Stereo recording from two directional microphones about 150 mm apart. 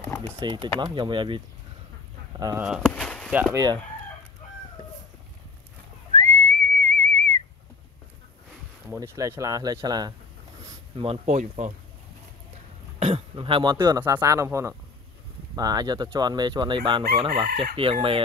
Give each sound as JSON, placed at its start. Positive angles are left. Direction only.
{"t": 0.4, "sound": "speech", "side_deg": -30}
{"t": 2.5, "sound": "speech", "side_deg": -10}
{"t": 2.8, "sound": "a sound", "side_deg": 5}
{"t": 3.5, "sound": "fowl", "side_deg": -25}
{"t": 6.1, "sound": "whistling", "side_deg": -50}
{"t": 8.8, "sound": "fowl", "side_deg": -15}
{"t": 11.2, "sound": "speech", "side_deg": -50}
{"t": 13.0, "sound": "speech", "side_deg": -40}
{"t": 14.0, "sound": "fowl", "side_deg": -20}
{"t": 17.1, "sound": "speech", "side_deg": -35}